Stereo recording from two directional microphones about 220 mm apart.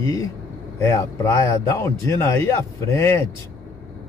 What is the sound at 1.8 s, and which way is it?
A man's voice, 10° left (ahead or behind).